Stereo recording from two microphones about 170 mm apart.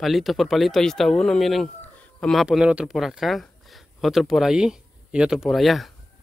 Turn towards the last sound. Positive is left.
turn(degrees=0)  # may be behind; listen again after turning